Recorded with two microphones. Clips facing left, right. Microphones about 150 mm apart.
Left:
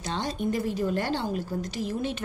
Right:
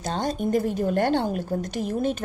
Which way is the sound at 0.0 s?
45° right (ahead or behind).